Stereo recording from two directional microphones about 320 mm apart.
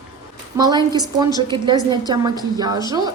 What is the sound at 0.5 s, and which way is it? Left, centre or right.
A woman's voice, centre.